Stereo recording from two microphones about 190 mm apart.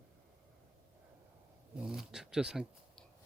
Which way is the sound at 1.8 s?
5° right (ahead or behind).